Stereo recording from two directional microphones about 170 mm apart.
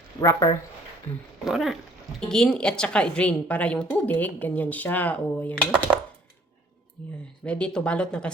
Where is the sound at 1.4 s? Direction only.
Centre (ahead or behind).